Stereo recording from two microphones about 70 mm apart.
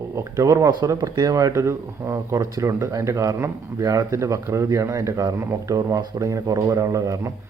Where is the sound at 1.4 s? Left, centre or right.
Right.